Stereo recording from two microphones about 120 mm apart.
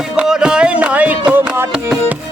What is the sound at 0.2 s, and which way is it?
Music, 5° right (ahead or behind).